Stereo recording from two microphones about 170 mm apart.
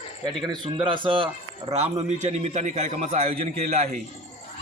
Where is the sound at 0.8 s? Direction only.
30° right (ahead or behind).